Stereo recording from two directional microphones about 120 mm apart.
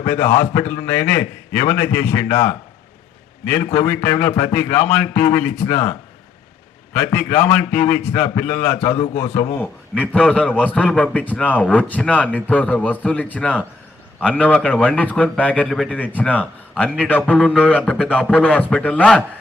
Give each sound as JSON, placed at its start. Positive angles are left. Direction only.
{"t": 0.0, "sound": "a man's voice", "side_deg": 20}
{"t": 6.9, "sound": "a man's voice", "side_deg": 15}
{"t": 10.2, "sound": "speech", "side_deg": 10}